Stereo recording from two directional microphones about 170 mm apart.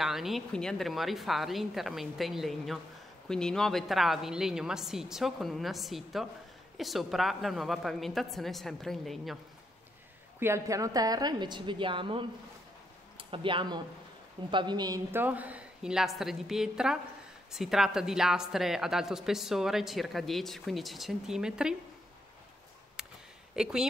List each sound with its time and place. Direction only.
0.0 s a woman's voice: centre (ahead or behind)
10.4 s a woman's voice: 15° right (ahead or behind)
15.0 s a woman's voice: 10° right (ahead or behind)
23.0 s a sound: 5° right (ahead or behind)
23.5 s a woman's voice: 5° right (ahead or behind)